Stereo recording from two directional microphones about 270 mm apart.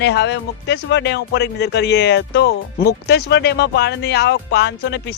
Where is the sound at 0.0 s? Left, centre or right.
Left.